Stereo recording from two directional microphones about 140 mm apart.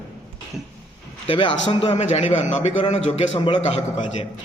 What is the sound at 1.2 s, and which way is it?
A man's voice, 40° left (ahead or behind).